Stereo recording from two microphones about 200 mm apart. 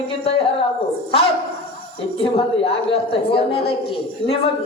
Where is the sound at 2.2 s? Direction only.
30° left (ahead or behind).